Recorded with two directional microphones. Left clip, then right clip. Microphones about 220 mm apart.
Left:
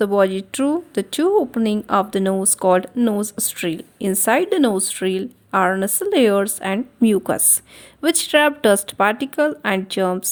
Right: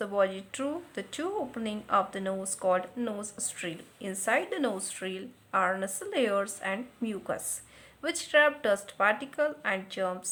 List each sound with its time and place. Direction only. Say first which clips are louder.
0.0 s a woman's voice: left 11 dB; 40° left (ahead or behind)